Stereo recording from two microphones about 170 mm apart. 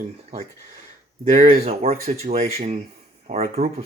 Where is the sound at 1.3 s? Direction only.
40° right (ahead or behind).